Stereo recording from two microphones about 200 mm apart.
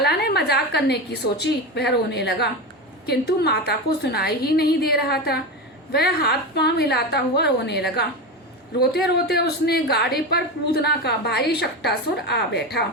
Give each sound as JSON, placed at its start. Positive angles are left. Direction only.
{"t": 0.0, "sound": "a woman's voice", "side_deg": 55}